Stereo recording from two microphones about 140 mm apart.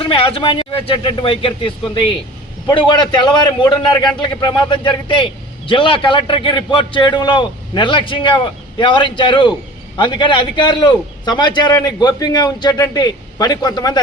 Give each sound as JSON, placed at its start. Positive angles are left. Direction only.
{"t": 0.0, "sound": "a man's voice", "side_deg": 40}